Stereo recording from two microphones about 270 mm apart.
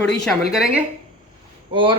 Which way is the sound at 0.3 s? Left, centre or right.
Centre.